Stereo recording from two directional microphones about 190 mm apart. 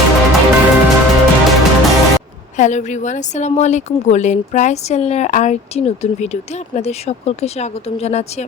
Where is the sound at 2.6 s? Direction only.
40° left (ahead or behind).